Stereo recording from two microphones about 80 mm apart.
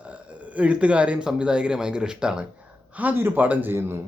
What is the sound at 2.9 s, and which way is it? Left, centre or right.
Speech, right.